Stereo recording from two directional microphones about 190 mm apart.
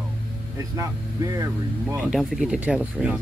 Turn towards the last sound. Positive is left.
turn(degrees=-5)  # may be behind; listen again after turning